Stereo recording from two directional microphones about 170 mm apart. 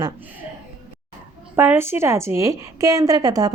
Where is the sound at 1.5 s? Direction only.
15° right (ahead or behind).